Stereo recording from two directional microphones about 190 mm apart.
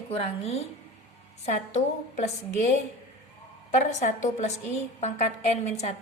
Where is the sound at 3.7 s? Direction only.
40° left (ahead or behind).